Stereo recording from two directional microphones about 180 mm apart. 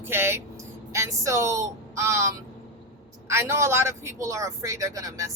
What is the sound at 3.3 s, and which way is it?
A man's voice, 15° right (ahead or behind).